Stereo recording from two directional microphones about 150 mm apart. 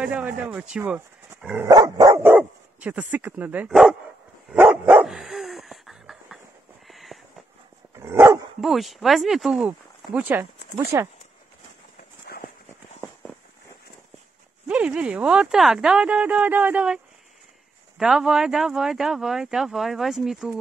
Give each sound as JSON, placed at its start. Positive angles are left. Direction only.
{"t": 0.0, "sound": "speech", "side_deg": -10}
{"t": 1.7, "sound": "speech", "side_deg": -25}
{"t": 4.5, "sound": "dog", "side_deg": -5}
{"t": 6.9, "sound": "a sound", "side_deg": 0}
{"t": 7.9, "sound": "dog", "side_deg": -20}
{"t": 8.5, "sound": "speech", "side_deg": 0}
{"t": 14.7, "sound": "speech", "side_deg": -10}